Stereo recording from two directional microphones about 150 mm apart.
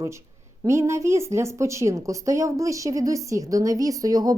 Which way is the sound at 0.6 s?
20° right (ahead or behind).